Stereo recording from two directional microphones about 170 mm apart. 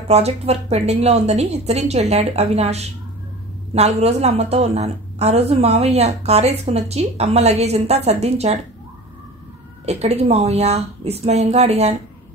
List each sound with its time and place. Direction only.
0.1 s a woman's voice: 40° right (ahead or behind)
9.8 s a woman's voice: 40° right (ahead or behind)